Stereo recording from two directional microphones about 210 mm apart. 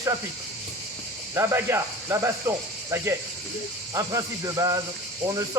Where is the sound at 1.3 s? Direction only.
10° right (ahead or behind).